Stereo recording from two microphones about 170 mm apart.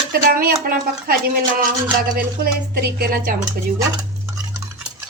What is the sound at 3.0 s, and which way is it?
Speech, 60° right (ahead or behind).